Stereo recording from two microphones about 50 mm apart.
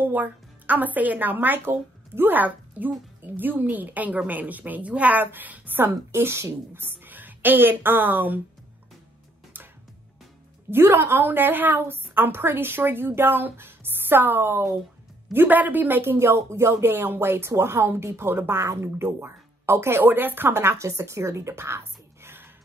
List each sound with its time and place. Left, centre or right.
0.0 s a woman's voice: right
6.1 s speech: right
6.7 s a woman's voice: right
10.7 s a woman's voice: right
11.2 s a woman's voice: right
16.3 s speech: right
18.6 s speech: right
20.1 s speech: right